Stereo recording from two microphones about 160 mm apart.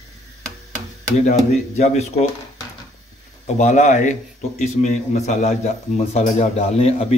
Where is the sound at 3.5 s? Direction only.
45° left (ahead or behind).